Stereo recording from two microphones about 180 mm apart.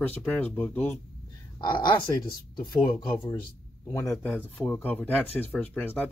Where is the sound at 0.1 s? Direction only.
5° left (ahead or behind).